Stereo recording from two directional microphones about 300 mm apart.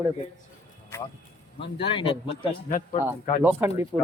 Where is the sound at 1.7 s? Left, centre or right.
Centre.